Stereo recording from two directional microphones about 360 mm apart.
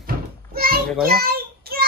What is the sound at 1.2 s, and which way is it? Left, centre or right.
Child singing, right.